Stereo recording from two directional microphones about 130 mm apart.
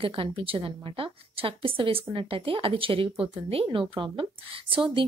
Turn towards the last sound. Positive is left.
turn(degrees=-40)  # may be behind; listen again after turning